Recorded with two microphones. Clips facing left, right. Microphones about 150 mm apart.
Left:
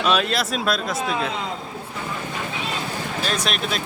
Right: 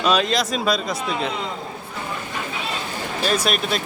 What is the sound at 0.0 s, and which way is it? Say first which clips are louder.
Speech: right 1 dB; 5° left (ahead or behind).